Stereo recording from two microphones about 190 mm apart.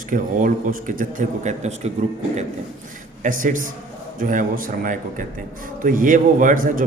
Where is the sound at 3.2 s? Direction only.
45° right (ahead or behind).